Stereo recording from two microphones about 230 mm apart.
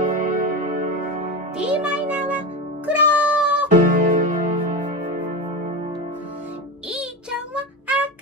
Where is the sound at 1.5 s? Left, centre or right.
Centre.